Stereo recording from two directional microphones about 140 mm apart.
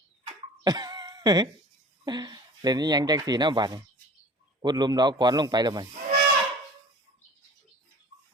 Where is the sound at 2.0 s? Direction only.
30° right (ahead or behind).